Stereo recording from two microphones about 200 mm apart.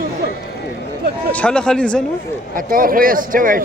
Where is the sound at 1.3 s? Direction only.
5° left (ahead or behind).